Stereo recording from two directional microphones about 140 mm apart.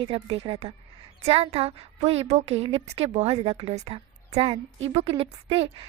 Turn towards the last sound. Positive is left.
turn(degrees=-40)  # may be behind; listen again after turning